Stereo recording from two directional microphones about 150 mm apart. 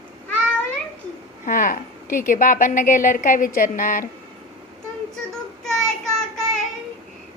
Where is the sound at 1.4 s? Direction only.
65° left (ahead or behind).